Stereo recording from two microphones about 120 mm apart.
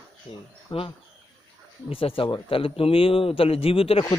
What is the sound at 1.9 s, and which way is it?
Speech, 50° left (ahead or behind).